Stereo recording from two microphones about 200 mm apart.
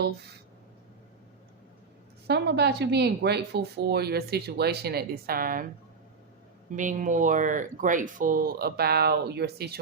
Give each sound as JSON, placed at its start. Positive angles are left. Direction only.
{"t": 2.2, "sound": "speech", "side_deg": -55}
{"t": 6.7, "sound": "speech", "side_deg": -40}